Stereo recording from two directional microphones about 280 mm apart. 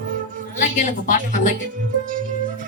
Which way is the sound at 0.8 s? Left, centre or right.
Left.